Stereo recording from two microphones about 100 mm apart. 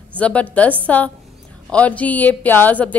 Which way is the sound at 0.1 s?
15° left (ahead or behind).